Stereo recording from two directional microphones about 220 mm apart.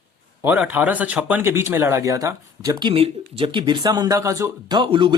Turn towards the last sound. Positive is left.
turn(degrees=-20)  # may be behind; listen again after turning